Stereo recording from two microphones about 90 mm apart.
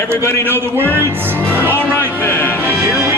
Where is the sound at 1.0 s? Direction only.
25° right (ahead or behind).